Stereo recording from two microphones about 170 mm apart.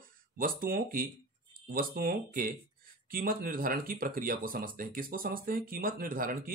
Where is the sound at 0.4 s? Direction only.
55° right (ahead or behind).